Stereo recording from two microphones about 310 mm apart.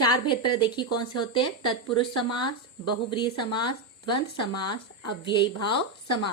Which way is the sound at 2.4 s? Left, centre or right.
Centre.